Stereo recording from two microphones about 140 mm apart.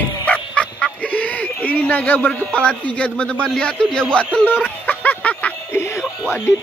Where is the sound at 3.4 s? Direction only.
5° left (ahead or behind).